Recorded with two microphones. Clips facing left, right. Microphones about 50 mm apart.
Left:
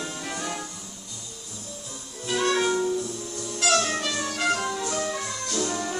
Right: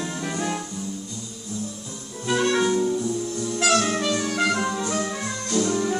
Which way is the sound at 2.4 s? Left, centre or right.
Centre.